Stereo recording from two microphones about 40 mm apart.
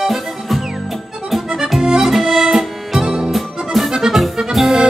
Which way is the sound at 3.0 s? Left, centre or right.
Right.